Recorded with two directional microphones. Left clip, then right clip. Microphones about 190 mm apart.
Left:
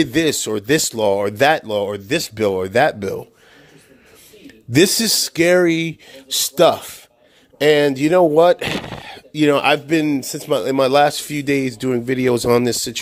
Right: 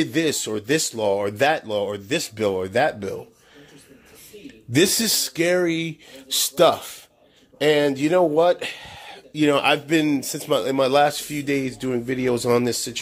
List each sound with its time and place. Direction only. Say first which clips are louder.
0.0 s speech: left 5 dB; 40° left (ahead or behind)
4.7 s speech: left 5 dB; 35° left (ahead or behind)